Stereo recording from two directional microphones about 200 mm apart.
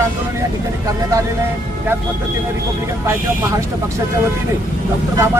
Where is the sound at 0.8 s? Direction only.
15° right (ahead or behind).